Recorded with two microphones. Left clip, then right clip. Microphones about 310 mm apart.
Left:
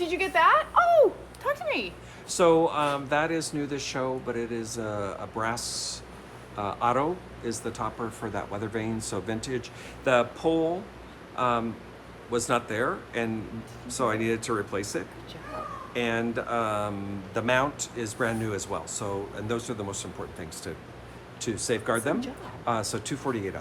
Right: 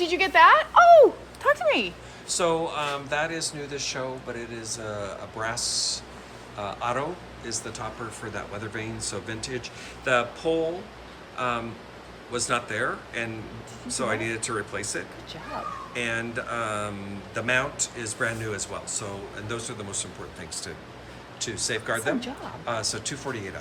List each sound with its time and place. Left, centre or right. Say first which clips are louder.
0.0 s a sound: right 5 dB; right
2.3 s speech: left 4 dB; left
21.3 s speech: even; centre